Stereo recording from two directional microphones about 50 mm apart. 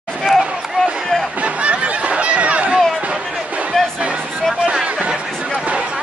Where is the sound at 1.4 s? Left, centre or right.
Right.